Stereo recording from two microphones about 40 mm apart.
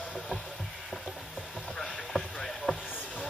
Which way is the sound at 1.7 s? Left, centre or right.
Centre.